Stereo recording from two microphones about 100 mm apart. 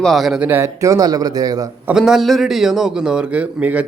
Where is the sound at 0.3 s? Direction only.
20° right (ahead or behind).